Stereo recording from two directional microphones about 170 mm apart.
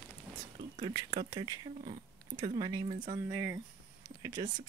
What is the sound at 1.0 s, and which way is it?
Speech, 30° right (ahead or behind).